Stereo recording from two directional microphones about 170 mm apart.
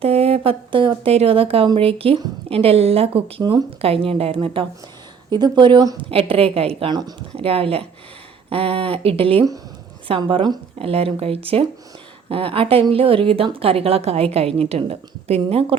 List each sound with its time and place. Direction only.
0.0 s a woman's voice: 35° right (ahead or behind)